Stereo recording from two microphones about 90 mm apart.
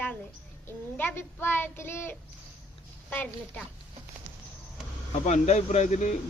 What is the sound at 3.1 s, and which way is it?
Speech, 15° left (ahead or behind).